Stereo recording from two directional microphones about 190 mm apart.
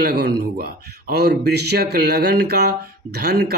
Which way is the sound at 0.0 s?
60° right (ahead or behind).